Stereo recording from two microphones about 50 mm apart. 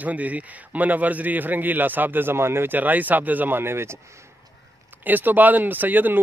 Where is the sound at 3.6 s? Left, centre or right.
Right.